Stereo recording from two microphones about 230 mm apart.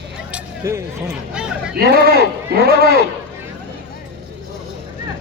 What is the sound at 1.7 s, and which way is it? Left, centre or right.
Speech, right.